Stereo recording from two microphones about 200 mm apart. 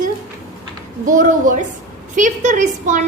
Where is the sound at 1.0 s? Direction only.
40° right (ahead or behind).